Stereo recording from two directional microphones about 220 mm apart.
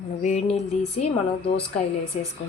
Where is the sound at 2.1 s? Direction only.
30° left (ahead or behind).